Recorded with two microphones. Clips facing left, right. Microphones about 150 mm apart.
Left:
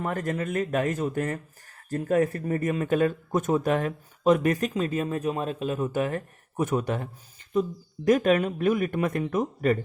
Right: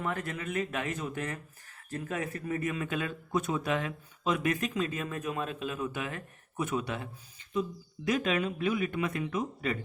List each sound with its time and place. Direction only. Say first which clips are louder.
0.0 s speech: left 6 dB; 45° left (ahead or behind)